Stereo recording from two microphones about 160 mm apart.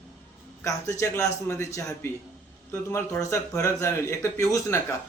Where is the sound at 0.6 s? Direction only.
20° left (ahead or behind).